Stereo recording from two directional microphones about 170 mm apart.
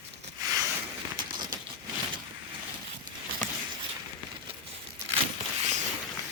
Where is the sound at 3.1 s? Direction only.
25° right (ahead or behind).